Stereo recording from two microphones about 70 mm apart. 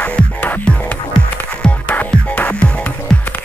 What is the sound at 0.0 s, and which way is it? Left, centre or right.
Music, left.